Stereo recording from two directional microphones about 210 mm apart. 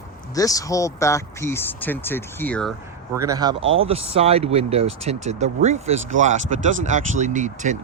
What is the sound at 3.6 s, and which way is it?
Speech, 70° right (ahead or behind).